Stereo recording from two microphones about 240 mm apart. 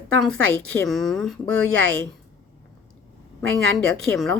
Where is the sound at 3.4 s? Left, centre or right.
Right.